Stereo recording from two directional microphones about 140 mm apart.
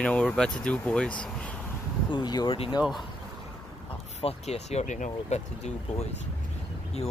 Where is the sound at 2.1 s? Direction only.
30° left (ahead or behind).